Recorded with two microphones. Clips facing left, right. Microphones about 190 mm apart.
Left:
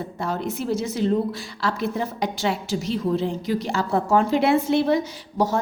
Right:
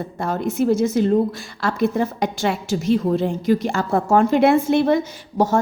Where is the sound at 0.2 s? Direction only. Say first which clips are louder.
Right 6 dB; 50° right (ahead or behind).